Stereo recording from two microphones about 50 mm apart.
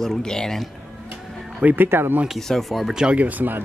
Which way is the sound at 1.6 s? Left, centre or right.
Right.